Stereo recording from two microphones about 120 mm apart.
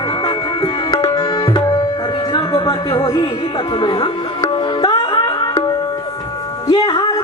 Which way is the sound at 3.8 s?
40° left (ahead or behind).